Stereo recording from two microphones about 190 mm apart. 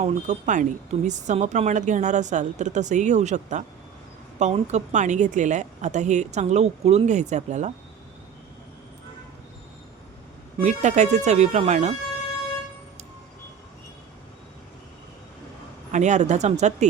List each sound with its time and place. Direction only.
0.0 s speech: 40° right (ahead or behind)
10.6 s speech: 40° right (ahead or behind)
15.9 s speech: 40° right (ahead or behind)